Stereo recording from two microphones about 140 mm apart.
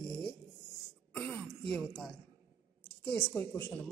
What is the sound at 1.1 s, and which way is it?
A woman's voice, 10° left (ahead or behind).